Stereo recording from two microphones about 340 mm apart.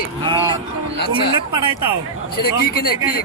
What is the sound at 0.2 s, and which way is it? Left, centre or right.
Vehicle, centre.